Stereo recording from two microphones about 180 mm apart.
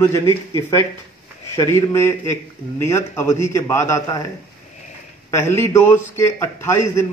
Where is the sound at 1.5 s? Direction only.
15° left (ahead or behind).